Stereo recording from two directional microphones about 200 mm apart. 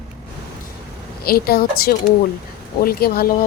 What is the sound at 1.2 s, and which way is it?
Speech, 50° left (ahead or behind).